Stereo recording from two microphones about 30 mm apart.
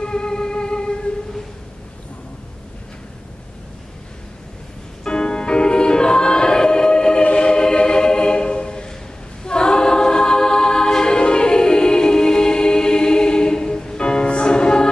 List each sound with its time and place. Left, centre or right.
0.0 s music: left
5.0 s choir: left
7.3 s music: left
9.4 s choir: left